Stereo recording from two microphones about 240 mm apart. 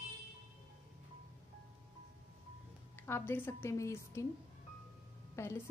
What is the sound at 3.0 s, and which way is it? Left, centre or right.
Speech, centre.